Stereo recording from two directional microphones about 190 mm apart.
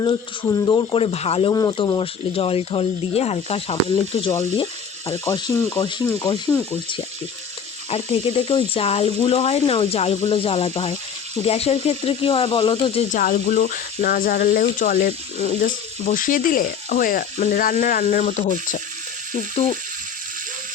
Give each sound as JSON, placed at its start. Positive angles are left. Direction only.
{"t": 0.0, "sound": "speech", "side_deg": 20}
{"t": 4.5, "sound": "frying", "side_deg": 25}
{"t": 5.1, "sound": "speech", "side_deg": 15}
{"t": 7.9, "sound": "speech", "side_deg": 30}
{"t": 13.1, "sound": "speech", "side_deg": 40}